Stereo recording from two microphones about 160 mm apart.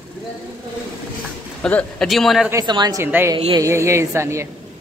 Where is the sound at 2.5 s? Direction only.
25° right (ahead or behind).